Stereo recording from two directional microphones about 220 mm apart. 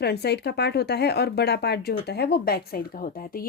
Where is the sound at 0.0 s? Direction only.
50° left (ahead or behind).